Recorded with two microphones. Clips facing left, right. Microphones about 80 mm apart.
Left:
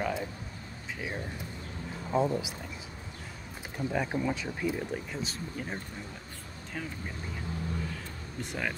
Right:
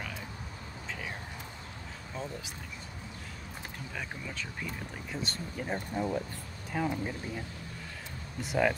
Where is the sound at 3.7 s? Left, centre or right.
Centre.